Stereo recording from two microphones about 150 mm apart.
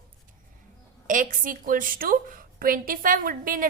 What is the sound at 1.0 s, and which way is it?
A woman's voice, 60° right (ahead or behind).